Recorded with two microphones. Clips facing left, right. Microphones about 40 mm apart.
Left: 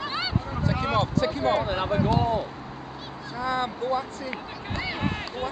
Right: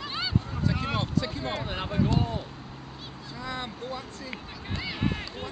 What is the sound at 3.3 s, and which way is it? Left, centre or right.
Speech, centre.